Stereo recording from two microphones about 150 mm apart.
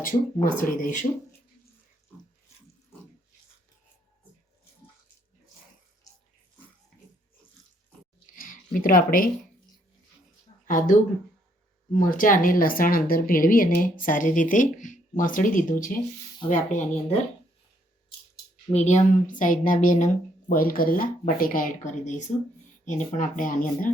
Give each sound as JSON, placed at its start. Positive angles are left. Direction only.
{"t": 0.4, "sound": "speech", "side_deg": 65}
{"t": 8.4, "sound": "a sound", "side_deg": 65}
{"t": 10.7, "sound": "speech", "side_deg": 65}
{"t": 11.9, "sound": "speech", "side_deg": 65}
{"t": 18.7, "sound": "speech", "side_deg": 50}